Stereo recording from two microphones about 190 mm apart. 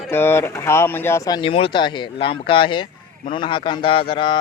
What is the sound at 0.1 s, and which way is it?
Speech, 10° left (ahead or behind).